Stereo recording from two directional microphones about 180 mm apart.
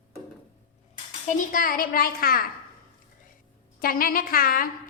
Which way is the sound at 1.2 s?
50° left (ahead or behind).